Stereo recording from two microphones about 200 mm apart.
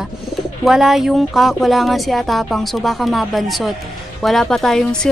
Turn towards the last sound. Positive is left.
turn(degrees=0)  # may be behind; listen again after turning